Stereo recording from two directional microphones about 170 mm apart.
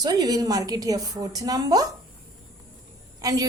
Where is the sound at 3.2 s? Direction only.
20° right (ahead or behind).